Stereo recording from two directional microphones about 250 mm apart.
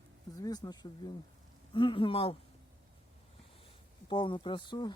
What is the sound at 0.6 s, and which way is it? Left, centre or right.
Speech, centre.